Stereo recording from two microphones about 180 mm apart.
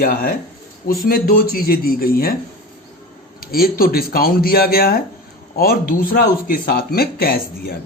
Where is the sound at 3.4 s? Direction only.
55° left (ahead or behind).